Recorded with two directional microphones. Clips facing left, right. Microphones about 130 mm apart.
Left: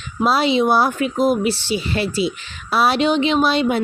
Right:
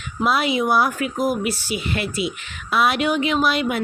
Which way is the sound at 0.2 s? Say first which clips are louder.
Left 4 dB; 30° left (ahead or behind).